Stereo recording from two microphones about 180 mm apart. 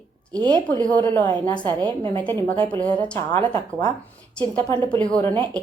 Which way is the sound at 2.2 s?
10° left (ahead or behind).